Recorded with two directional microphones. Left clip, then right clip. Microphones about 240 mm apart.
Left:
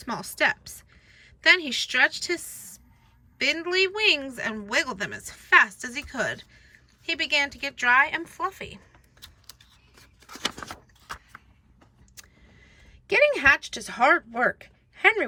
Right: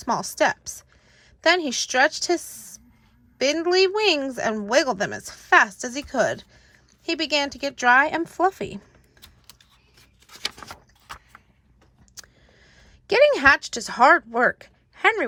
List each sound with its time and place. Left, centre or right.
0.0 s a woman's voice: centre
10.5 s a sound: right
12.8 s a woman's voice: centre